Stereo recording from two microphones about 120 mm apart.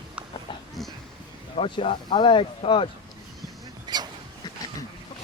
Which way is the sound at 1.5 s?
45° left (ahead or behind).